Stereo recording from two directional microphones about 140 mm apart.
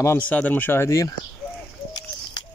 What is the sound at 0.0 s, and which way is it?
Speech, 15° left (ahead or behind).